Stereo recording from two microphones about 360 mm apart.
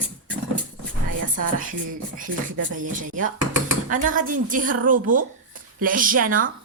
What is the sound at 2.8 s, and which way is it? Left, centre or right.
A woman's voice, right.